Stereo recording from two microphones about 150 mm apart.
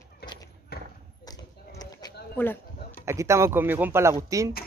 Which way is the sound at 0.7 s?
90° left.